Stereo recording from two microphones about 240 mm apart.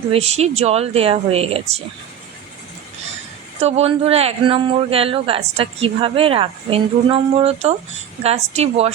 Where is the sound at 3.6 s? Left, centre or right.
Right.